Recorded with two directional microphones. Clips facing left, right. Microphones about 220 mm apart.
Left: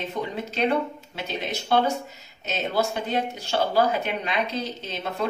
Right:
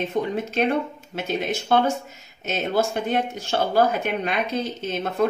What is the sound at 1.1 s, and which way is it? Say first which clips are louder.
A woman's voice: right 6 dB; 50° right (ahead or behind).